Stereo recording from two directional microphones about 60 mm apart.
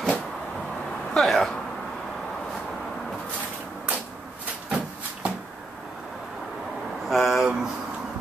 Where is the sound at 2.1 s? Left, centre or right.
Centre.